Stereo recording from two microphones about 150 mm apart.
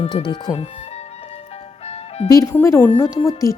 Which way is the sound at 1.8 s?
45° left (ahead or behind).